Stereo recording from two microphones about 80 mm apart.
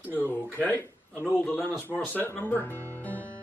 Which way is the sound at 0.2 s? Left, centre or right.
Left.